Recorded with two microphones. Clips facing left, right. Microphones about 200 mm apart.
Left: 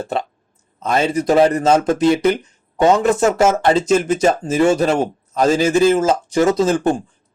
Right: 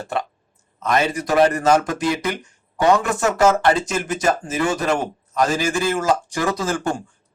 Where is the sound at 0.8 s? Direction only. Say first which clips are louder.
Left 3 dB; 25° left (ahead or behind).